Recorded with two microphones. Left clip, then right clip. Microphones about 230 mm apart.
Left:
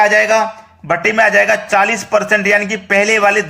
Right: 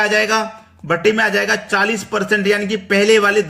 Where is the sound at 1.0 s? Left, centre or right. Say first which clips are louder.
Left 5 dB; centre.